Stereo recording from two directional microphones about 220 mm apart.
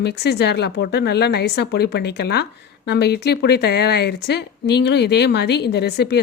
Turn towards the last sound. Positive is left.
turn(degrees=50)  # may be behind; listen again after turning